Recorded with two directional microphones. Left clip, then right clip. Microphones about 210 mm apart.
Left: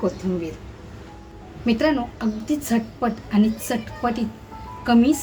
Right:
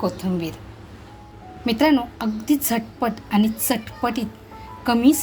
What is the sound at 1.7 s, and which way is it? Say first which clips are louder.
A woman's voice: right 2 dB; 40° right (ahead or behind).